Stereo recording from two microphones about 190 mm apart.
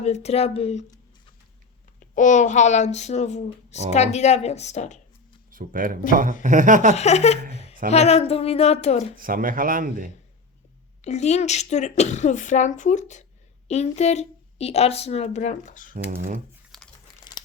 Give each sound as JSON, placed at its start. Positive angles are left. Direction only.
{"t": 0.0, "sound": "speech", "side_deg": 35}
{"t": 2.1, "sound": "speech", "side_deg": 40}
{"t": 5.5, "sound": "speech", "side_deg": -45}
{"t": 6.9, "sound": "speech", "side_deg": 35}
{"t": 7.5, "sound": "a sound", "side_deg": 35}
{"t": 7.9, "sound": "speech", "side_deg": 35}
{"t": 9.1, "sound": "speech", "side_deg": -50}
{"t": 11.0, "sound": "speech", "side_deg": 35}
{"t": 16.7, "sound": "crumpling", "side_deg": 0}